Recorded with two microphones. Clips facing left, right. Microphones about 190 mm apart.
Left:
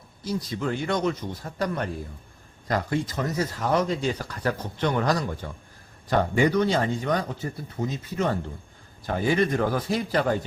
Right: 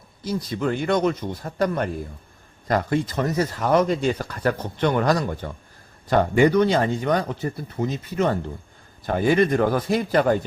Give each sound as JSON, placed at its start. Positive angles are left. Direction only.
{"t": 0.3, "sound": "speech", "side_deg": -60}